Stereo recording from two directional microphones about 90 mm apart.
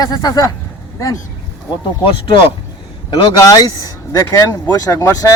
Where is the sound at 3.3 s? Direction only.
40° left (ahead or behind).